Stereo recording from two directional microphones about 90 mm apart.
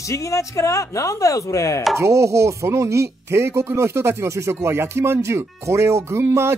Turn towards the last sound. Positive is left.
turn(degrees=-30)  # may be behind; listen again after turning